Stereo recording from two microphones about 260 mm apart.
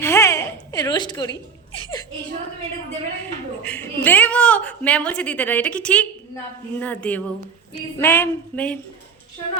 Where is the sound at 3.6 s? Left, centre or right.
Centre.